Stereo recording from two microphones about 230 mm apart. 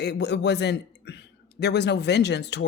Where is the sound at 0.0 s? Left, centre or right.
Left.